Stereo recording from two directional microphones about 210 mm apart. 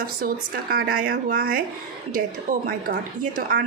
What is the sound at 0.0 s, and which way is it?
A woman's voice, 45° right (ahead or behind).